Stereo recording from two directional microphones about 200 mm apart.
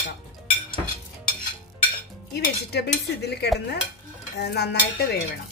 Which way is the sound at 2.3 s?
55° left (ahead or behind).